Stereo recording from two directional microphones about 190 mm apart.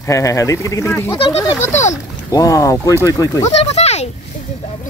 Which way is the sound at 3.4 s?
35° left (ahead or behind).